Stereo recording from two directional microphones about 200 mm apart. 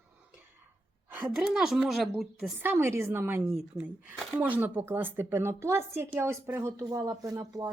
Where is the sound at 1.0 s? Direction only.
10° right (ahead or behind).